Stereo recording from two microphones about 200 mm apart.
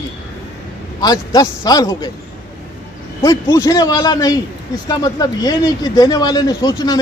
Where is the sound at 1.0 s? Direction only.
20° left (ahead or behind).